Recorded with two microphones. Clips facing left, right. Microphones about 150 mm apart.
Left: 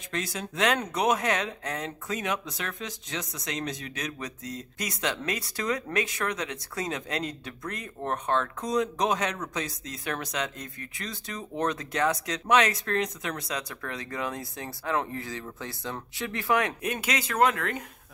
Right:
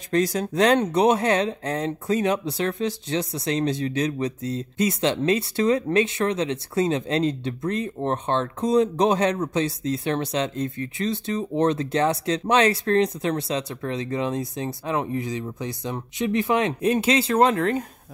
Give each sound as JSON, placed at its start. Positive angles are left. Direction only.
{"t": 0.1, "sound": "speech", "side_deg": -40}